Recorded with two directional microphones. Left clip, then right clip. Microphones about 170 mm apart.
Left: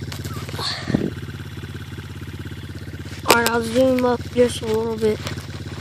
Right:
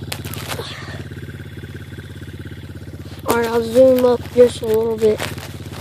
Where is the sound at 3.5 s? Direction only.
35° left (ahead or behind).